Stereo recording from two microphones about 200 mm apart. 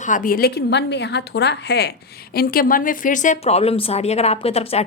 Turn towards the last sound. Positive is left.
turn(degrees=30)  # may be behind; listen again after turning